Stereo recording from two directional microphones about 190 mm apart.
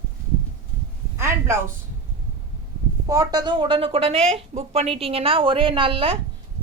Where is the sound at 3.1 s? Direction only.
20° right (ahead or behind).